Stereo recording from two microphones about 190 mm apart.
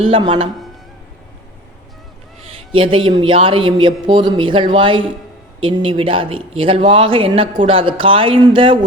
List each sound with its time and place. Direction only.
0.0 s speech: 25° right (ahead or behind)
2.7 s speech: 30° right (ahead or behind)